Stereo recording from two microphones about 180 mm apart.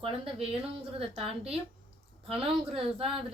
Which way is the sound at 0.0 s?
30° right (ahead or behind).